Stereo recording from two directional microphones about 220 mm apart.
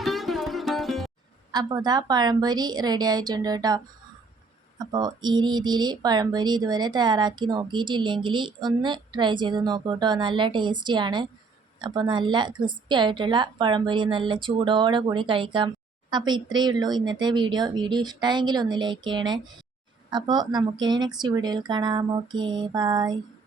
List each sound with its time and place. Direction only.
0.0 s music: centre (ahead or behind)
1.5 s a woman's voice: 20° right (ahead or behind)
4.8 s a woman's voice: 20° right (ahead or behind)